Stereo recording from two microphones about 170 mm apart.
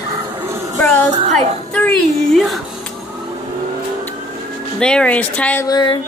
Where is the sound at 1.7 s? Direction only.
10° left (ahead or behind).